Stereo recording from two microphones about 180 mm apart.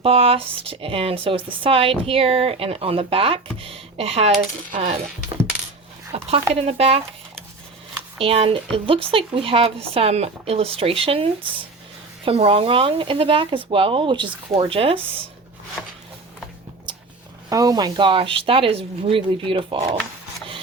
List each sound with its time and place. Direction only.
0.0 s speech: 30° right (ahead or behind)
6.1 s speech: 35° right (ahead or behind)
8.2 s speech: 30° right (ahead or behind)
16.9 s a sound: 25° right (ahead or behind)
17.5 s speech: 20° right (ahead or behind)